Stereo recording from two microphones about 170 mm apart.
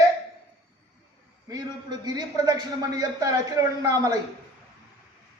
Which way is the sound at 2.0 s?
25° right (ahead or behind).